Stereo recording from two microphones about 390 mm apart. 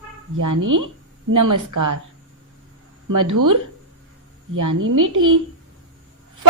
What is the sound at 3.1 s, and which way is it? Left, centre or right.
A woman's voice, right.